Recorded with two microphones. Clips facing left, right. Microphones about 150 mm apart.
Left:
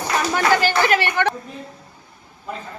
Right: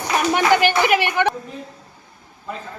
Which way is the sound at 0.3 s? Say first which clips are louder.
Right 1 dB; 20° right (ahead or behind).